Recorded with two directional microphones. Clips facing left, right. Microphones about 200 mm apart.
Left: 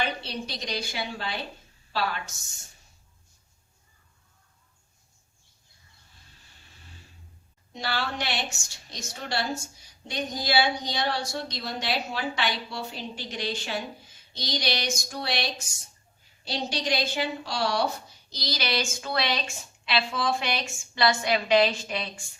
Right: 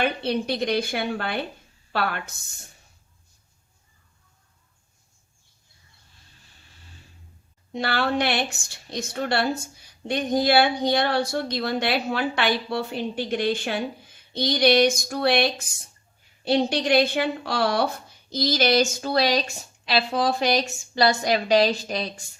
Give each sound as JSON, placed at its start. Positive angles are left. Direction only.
{"t": 0.0, "sound": "a woman's voice", "side_deg": -55}
{"t": 7.7, "sound": "a woman's voice", "side_deg": -60}